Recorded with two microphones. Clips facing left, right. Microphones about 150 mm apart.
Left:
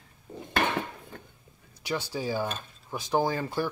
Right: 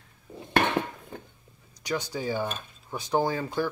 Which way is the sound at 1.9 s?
5° left (ahead or behind).